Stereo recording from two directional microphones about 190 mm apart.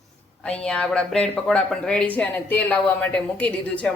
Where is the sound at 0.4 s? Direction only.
5° left (ahead or behind).